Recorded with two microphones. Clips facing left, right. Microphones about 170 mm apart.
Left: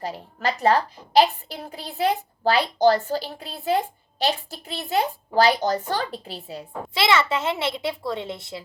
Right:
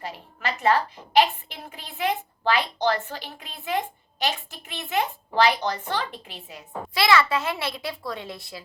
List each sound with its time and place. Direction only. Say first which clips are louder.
0.0 s a woman's voice: left 5 dB; 35° left (ahead or behind)